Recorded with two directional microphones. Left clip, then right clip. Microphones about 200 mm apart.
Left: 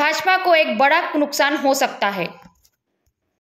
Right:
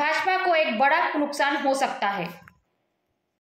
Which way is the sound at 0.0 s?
50° left (ahead or behind).